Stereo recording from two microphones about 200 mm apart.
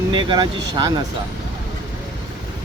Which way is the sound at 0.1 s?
25° right (ahead or behind).